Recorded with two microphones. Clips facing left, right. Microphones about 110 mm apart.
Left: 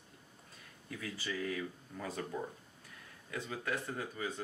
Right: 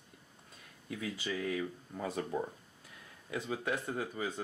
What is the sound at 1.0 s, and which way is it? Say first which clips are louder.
Speech: right 2 dB; 20° right (ahead or behind).